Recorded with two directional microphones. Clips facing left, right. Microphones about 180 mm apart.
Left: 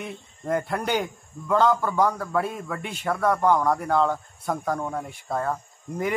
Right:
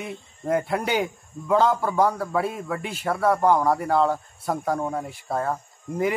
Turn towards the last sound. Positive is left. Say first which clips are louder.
# right 3 dB
turn(degrees=-5)  # may be behind; listen again after turning